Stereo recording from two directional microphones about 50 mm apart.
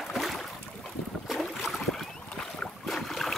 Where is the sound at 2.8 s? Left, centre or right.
Centre.